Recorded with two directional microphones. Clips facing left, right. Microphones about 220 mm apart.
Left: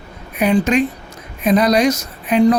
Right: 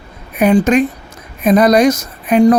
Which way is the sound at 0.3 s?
50° right (ahead or behind).